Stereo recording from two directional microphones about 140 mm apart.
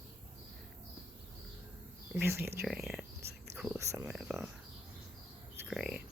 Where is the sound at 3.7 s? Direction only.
20° right (ahead or behind).